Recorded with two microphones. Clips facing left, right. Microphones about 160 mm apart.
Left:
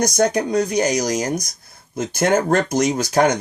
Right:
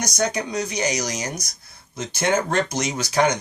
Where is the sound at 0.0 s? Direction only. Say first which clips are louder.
Left 7 dB; 50° left (ahead or behind).